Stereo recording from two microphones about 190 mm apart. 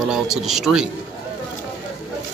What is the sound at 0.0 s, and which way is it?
Speech, centre (ahead or behind).